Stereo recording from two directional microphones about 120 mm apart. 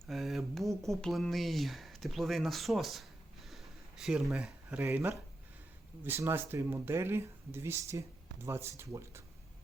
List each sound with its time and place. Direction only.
0.1 s speech: centre (ahead or behind); by 9.2 s 25° right (ahead or behind)